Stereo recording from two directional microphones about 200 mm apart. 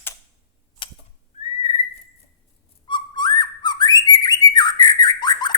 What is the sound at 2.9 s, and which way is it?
Bird, 20° left (ahead or behind).